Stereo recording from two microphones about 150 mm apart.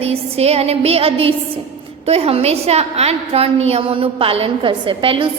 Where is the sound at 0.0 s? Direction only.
45° right (ahead or behind).